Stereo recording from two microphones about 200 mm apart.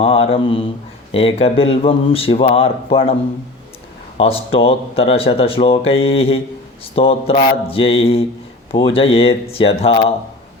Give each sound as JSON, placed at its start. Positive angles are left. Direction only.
{"t": 0.0, "sound": "speech", "side_deg": 30}
{"t": 4.2, "sound": "speech", "side_deg": 30}